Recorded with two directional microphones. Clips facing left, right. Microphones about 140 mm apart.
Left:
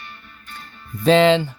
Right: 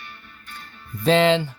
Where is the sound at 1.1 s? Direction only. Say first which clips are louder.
Left 3 dB; 90° left.